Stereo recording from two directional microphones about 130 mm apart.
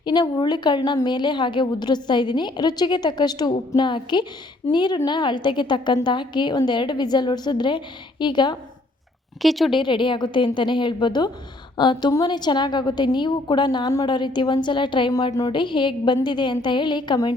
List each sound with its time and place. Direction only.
0.0 s a woman's voice: 35° left (ahead or behind)
9.4 s a woman's voice: centre (ahead or behind)
9.7 s a woman's voice: 40° left (ahead or behind)
15.1 s a woman's voice: 30° left (ahead or behind)